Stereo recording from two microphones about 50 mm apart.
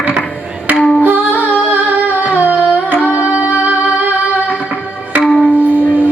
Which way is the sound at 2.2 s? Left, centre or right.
Right.